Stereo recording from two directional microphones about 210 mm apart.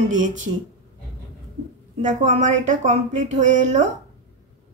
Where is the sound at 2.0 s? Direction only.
35° right (ahead or behind).